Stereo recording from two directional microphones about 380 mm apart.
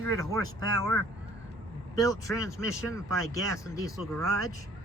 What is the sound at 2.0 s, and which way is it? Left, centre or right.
Speech, centre.